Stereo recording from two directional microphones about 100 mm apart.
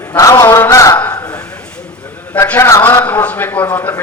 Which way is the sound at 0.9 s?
20° left (ahead or behind).